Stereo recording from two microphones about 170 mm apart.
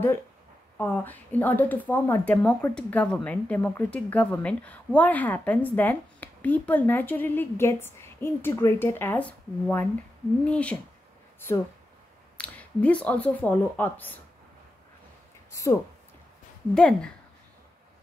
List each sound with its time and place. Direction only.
0.7 s speech: 10° left (ahead or behind)
15.5 s speech: 20° left (ahead or behind)
16.7 s speech: 5° left (ahead or behind)